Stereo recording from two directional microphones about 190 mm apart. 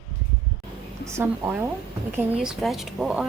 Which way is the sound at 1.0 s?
15° right (ahead or behind).